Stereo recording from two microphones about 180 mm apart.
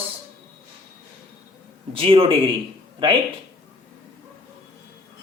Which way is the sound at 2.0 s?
30° right (ahead or behind).